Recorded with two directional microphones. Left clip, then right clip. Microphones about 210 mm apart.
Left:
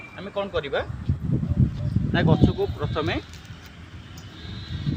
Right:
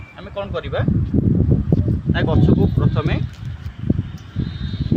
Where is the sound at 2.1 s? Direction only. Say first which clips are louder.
Right 3 dB; 10° left (ahead or behind).